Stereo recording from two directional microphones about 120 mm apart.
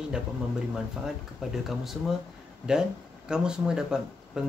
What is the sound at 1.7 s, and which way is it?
Speech, centre (ahead or behind).